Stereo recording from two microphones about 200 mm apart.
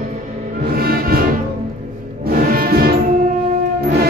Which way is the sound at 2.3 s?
45° right (ahead or behind).